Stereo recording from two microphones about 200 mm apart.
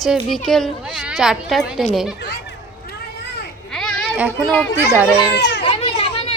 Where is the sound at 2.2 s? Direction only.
55° left (ahead or behind).